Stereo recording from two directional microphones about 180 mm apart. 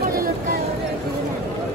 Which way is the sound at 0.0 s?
55° right (ahead or behind).